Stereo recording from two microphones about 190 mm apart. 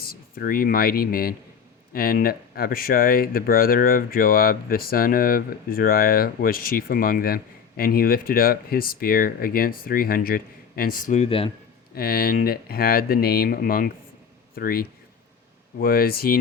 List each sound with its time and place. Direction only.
0.0 s speech: 50° left (ahead or behind); by 11.5 s 30° left (ahead or behind)
11.9 s speech: 55° left (ahead or behind)